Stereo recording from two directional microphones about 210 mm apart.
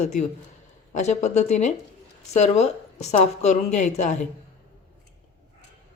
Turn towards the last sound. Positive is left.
turn(degrees=35)  # may be behind; listen again after turning